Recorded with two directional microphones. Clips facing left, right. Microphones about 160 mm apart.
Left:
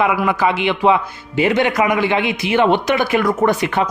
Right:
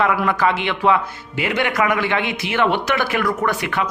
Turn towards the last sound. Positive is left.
turn(degrees=25)  # may be behind; listen again after turning